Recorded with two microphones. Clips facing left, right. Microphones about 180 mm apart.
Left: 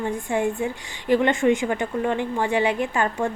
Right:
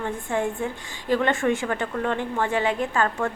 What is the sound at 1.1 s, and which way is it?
A woman's voice, 15° left (ahead or behind).